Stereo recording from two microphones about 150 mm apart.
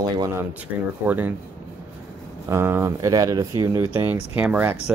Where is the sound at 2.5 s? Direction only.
15° right (ahead or behind).